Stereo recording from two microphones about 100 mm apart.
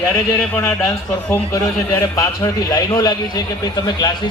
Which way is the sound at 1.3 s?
25° left (ahead or behind).